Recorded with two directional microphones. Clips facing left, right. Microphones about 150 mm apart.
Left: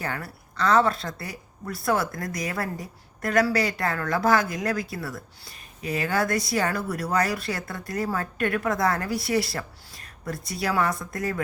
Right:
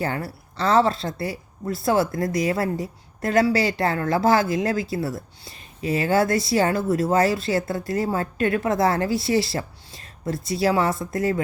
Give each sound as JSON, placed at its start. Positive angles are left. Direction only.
{"t": 0.0, "sound": "a woman's voice", "side_deg": -30}